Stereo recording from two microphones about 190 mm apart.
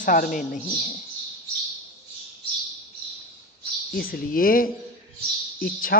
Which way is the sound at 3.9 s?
50° left (ahead or behind).